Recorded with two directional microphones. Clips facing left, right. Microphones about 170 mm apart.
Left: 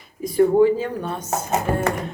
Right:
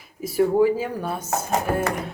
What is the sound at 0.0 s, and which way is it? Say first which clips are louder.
Speech: left 3 dB; 5° right (ahead or behind).